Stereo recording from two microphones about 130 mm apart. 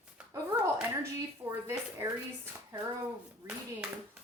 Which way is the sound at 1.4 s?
15° right (ahead or behind).